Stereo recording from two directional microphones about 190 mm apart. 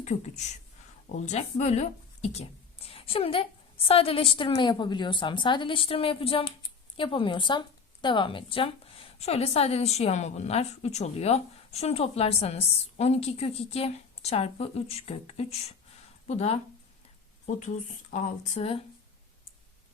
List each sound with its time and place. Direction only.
0.0 s speech: 40° left (ahead or behind)
18.1 s speech: 35° left (ahead or behind)